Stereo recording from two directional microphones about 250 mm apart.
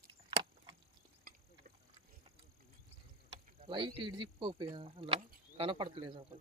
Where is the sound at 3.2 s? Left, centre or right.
Right.